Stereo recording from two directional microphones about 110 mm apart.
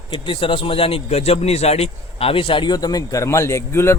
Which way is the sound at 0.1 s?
50° left (ahead or behind).